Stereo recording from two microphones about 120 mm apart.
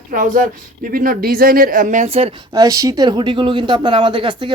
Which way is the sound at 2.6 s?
30° right (ahead or behind).